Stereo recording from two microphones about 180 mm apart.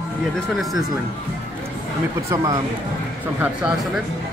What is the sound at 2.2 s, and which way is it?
Speech, 20° right (ahead or behind).